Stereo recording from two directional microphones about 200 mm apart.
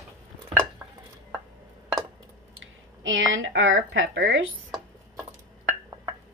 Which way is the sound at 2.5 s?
75° right (ahead or behind).